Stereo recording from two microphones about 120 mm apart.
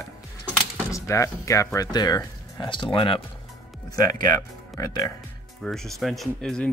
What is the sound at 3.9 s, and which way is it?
Speech, 30° left (ahead or behind).